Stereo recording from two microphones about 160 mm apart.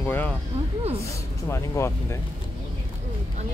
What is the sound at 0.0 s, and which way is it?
Speech, 10° left (ahead or behind).